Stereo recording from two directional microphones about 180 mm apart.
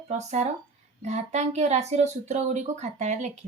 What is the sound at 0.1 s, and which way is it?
Speech, 40° right (ahead or behind).